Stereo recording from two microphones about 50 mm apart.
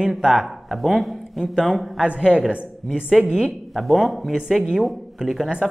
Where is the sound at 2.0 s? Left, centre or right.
Right.